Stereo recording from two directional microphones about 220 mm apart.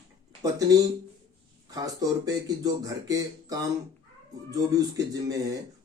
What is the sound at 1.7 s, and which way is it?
Speech, 15° right (ahead or behind).